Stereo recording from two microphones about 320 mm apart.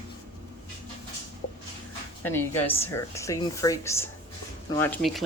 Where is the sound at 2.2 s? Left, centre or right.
Centre.